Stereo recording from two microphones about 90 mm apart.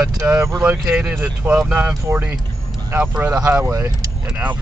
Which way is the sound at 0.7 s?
25° right (ahead or behind).